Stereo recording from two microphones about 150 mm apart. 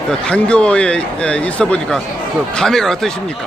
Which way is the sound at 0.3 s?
5° left (ahead or behind).